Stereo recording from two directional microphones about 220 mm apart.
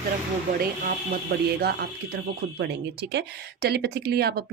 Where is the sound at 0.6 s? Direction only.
45° right (ahead or behind).